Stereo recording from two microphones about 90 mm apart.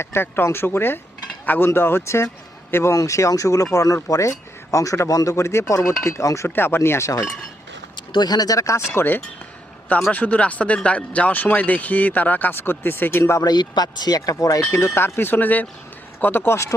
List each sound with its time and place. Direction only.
0.0 s speech: 25° left (ahead or behind)
7.9 s speech: 55° left (ahead or behind); by 8.8 s 35° left (ahead or behind)
9.0 s speech: 20° left (ahead or behind)
13.4 s speech: 50° left (ahead or behind)
14.2 s speech: 35° left (ahead or behind)